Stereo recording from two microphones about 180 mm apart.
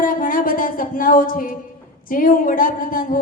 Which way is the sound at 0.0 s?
50° left (ahead or behind).